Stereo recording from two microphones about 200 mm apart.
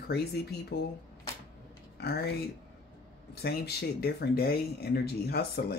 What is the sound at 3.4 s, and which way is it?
Speech, 50° left (ahead or behind).